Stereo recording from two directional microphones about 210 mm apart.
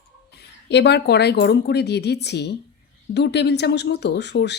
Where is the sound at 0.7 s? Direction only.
55° left (ahead or behind).